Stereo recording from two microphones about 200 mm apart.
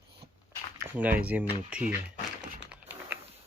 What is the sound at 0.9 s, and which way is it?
Speech, 10° right (ahead or behind).